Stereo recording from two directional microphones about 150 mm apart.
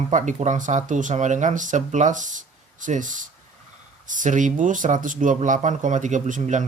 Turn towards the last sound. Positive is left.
turn(degrees=-55)  # may be behind; listen again after turning